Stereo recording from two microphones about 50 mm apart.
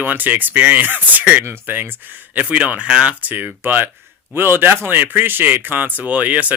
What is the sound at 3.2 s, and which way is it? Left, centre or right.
A man's voice, right.